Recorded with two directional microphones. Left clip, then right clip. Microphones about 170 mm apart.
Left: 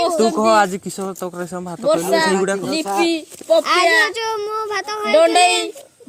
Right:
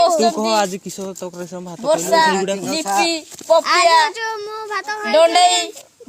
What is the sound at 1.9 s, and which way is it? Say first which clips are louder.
Speech: right 2 dB; 55° right (ahead or behind).